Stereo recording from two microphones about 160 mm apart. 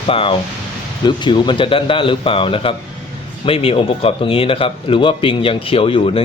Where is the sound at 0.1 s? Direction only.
35° left (ahead or behind).